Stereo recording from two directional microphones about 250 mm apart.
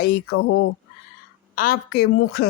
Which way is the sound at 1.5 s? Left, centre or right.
Left.